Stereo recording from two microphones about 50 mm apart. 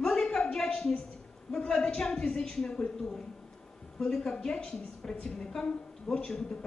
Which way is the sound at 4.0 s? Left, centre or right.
Centre.